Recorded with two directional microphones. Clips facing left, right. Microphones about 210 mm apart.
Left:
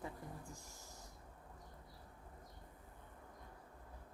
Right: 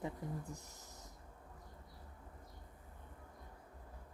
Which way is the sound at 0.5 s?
20° right (ahead or behind).